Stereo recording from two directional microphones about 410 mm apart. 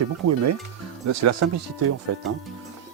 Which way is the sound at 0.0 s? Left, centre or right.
Right.